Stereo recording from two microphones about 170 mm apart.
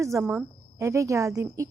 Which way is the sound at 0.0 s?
15° right (ahead or behind).